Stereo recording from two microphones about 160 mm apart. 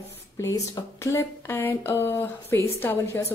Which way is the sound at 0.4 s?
20° left (ahead or behind).